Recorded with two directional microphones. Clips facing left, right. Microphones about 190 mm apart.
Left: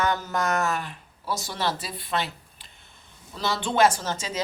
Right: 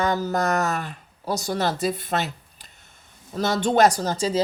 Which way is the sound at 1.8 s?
45° right (ahead or behind).